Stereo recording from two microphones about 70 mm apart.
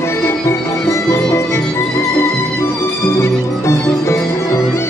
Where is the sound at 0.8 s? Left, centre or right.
Left.